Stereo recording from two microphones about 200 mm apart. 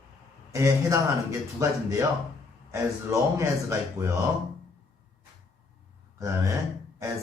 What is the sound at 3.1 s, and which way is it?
A man's voice, 15° right (ahead or behind).